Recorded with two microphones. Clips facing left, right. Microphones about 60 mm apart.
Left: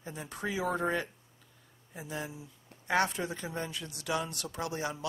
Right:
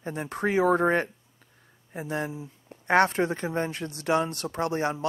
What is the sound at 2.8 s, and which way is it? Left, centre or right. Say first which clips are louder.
Speech: right 8 dB; right.